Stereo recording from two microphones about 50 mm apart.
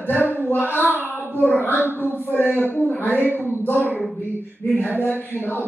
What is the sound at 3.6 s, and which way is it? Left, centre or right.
Speech, left.